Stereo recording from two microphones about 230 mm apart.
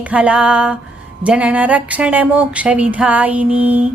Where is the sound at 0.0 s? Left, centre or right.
Centre.